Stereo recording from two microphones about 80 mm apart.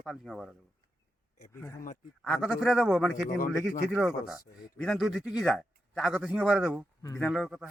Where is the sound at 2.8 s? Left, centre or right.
Centre.